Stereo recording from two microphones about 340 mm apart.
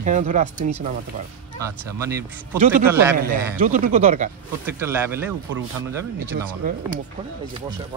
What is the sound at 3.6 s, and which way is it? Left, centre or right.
Speech, centre.